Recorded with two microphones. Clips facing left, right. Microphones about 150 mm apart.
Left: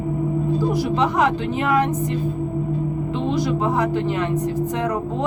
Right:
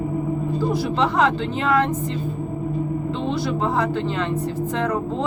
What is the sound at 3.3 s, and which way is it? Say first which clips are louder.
Speech: left 3 dB; 15° left (ahead or behind).